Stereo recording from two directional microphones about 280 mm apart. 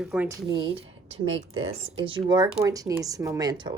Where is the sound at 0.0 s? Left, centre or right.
Centre.